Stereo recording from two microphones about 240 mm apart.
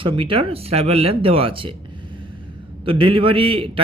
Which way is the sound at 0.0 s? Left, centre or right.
Right.